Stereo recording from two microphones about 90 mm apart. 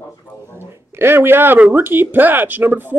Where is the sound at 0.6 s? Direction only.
25° right (ahead or behind).